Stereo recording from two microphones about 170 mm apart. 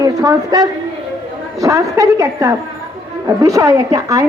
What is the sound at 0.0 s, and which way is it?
A woman's voice, 20° right (ahead or behind).